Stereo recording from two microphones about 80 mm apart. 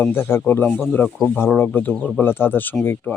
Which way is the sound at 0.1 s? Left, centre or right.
Left.